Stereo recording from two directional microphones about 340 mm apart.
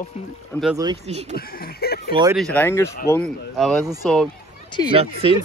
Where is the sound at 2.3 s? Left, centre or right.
Centre.